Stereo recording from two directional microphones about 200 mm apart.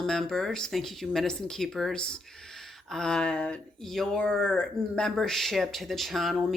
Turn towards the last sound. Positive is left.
turn(degrees=0)  # may be behind; listen again after turning